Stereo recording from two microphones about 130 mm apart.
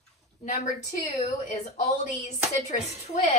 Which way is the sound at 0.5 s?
60° left (ahead or behind).